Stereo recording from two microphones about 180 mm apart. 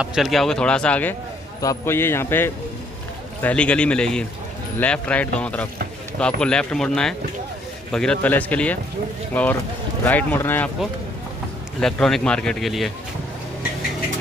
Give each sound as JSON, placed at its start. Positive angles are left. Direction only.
{"t": 0.0, "sound": "a man's voice", "side_deg": 0}
{"t": 11.8, "sound": "speech", "side_deg": 5}